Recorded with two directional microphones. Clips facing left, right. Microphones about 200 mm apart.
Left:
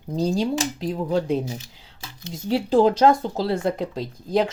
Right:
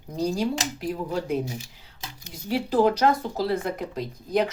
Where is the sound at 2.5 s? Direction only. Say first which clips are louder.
Left 3 dB; 30° left (ahead or behind).